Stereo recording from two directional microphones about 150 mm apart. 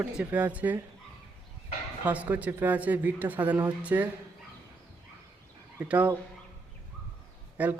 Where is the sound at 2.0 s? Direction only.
10° right (ahead or behind).